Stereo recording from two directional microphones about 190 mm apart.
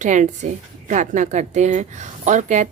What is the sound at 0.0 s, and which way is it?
A woman's voice, 40° right (ahead or behind).